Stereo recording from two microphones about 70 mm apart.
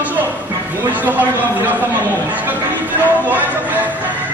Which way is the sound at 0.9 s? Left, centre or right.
Right.